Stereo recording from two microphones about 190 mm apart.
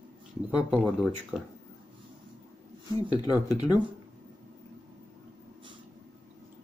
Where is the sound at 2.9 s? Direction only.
20° left (ahead or behind).